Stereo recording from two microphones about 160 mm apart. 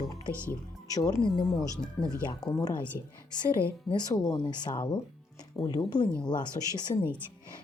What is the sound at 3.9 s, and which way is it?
Speech, 25° left (ahead or behind).